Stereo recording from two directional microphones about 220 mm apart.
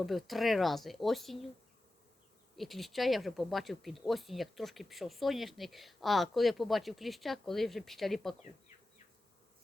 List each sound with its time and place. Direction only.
0.0 s speech: centre (ahead or behind)
2.6 s speech: centre (ahead or behind)